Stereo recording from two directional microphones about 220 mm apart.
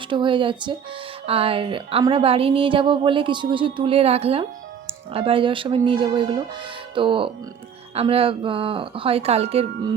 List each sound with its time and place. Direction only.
0.1 s a woman's voice: 20° right (ahead or behind)